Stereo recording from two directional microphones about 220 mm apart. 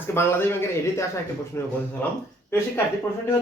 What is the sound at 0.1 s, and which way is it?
Speech, 10° left (ahead or behind).